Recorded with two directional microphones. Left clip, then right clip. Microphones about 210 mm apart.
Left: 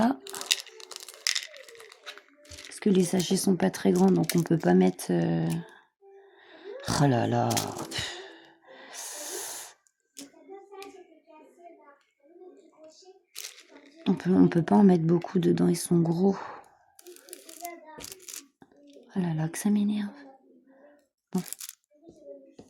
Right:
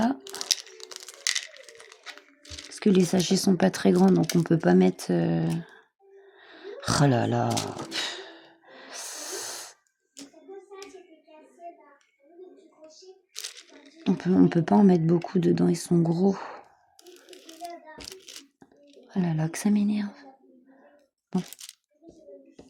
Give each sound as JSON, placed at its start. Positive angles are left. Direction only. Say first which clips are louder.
{"t": 0.0, "sound": "a sound", "louder": "even", "side_deg": 5}
{"t": 2.6, "sound": "speech", "louder": "right 2 dB", "side_deg": -5}
{"t": 6.4, "sound": "gasp", "louder": "right 3 dB", "side_deg": -10}
{"t": 14.0, "sound": "speech", "louder": "right 1 dB", "side_deg": 0}
{"t": 17.0, "sound": "a sound", "louder": "even", "side_deg": 20}
{"t": 19.1, "sound": "speech", "louder": "right 2 dB", "side_deg": -5}